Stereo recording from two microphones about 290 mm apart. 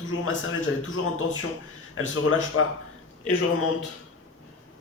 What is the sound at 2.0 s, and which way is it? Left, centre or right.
Speech, left.